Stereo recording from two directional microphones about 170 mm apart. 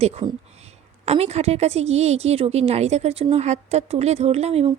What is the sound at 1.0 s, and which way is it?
Speech, 40° right (ahead or behind).